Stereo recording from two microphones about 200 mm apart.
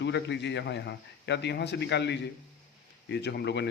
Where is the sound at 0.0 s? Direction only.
60° left (ahead or behind).